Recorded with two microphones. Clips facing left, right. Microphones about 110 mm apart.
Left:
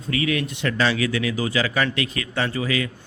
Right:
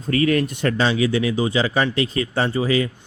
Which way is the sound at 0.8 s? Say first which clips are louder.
Right 2 dB; 25° right (ahead or behind).